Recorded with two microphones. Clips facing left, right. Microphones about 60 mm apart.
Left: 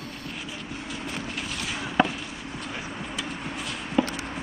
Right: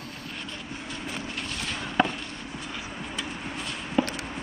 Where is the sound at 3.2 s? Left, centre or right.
Centre.